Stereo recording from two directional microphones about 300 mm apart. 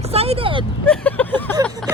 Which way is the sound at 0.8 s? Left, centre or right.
Centre.